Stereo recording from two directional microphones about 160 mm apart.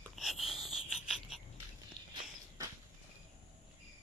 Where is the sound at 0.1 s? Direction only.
Centre (ahead or behind).